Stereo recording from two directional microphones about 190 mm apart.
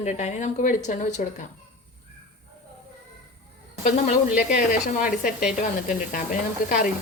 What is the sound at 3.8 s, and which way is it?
Speech, 40° left (ahead or behind).